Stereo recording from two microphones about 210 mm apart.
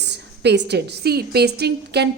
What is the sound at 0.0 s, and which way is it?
A woman's voice, 55° right (ahead or behind).